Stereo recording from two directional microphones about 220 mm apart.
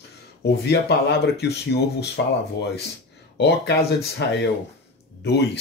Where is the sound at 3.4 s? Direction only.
50° left (ahead or behind).